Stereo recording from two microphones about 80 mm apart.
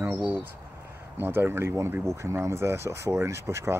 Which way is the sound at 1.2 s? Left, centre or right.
Right.